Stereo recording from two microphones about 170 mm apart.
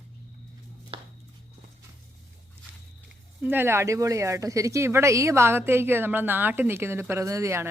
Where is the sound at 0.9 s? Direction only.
30° right (ahead or behind).